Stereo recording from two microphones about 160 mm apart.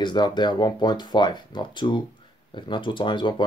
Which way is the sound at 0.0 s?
30° left (ahead or behind).